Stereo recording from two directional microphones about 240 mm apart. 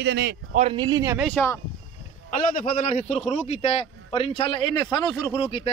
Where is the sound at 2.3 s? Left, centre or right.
Left.